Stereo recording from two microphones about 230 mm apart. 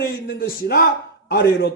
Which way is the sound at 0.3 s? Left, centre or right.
Left.